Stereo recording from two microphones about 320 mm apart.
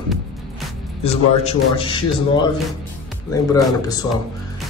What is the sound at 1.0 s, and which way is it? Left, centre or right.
Speech, centre.